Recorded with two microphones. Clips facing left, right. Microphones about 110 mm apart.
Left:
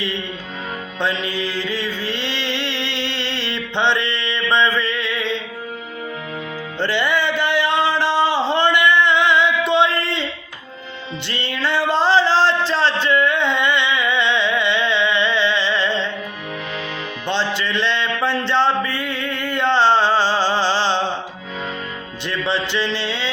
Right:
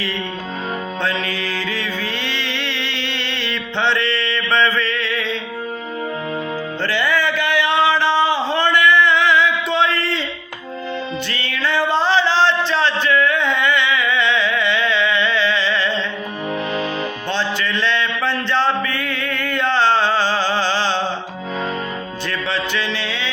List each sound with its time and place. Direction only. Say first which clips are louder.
1.0 s music: left 3 dB; 25° left (ahead or behind)
6.8 s a sound: even; 25° left (ahead or behind)
11.3 s music: left 3 dB; 30° left (ahead or behind)
17.2 s music: left 3 dB; 25° left (ahead or behind)
22.3 s music: left 2 dB; 25° left (ahead or behind)